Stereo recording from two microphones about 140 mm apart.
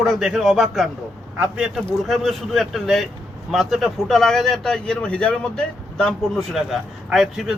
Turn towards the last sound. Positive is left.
turn(degrees=0)  # may be behind; listen again after turning